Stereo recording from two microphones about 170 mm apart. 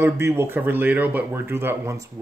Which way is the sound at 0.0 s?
15° right (ahead or behind).